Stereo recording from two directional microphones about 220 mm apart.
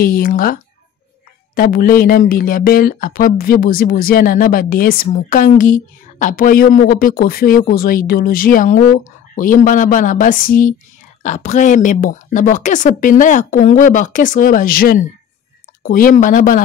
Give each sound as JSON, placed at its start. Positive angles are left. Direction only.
{"t": 0.0, "sound": "speech", "side_deg": 40}